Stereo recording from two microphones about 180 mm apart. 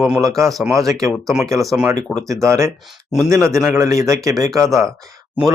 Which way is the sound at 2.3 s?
15° right (ahead or behind).